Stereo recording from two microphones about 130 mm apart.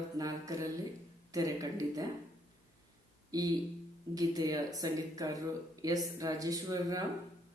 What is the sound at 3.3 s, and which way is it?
Speech, 30° right (ahead or behind).